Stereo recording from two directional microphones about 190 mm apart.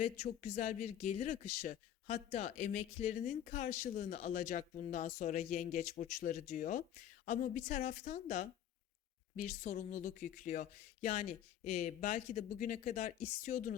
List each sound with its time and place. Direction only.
0.0 s speech: 35° left (ahead or behind)